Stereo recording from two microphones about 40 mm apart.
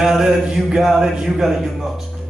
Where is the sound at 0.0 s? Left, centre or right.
Centre.